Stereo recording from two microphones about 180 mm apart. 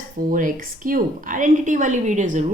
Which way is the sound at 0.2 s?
50° right (ahead or behind).